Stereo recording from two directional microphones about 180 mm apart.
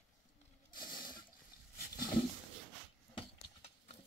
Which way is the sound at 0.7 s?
50° left (ahead or behind).